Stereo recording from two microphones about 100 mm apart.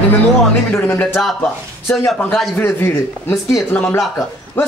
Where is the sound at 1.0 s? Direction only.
5° left (ahead or behind).